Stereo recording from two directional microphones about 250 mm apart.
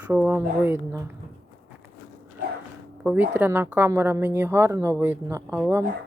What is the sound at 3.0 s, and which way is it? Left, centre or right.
A woman's voice, centre.